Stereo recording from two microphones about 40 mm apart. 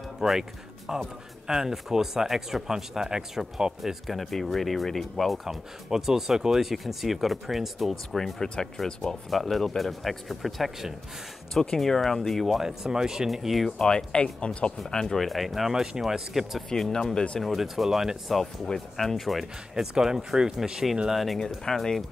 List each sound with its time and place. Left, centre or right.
0.2 s speech: centre
8.5 s speech: centre
9.3 s speech: centre
12.5 s speech: centre
13.3 s speech: centre
13.7 s speech: centre
15.1 s speech: centre
15.7 s speech: centre
16.7 s speech: centre
17.6 s speech: centre
18.3 s speech: centre
19.7 s speech: centre
21.1 s speech: centre
21.7 s speech: centre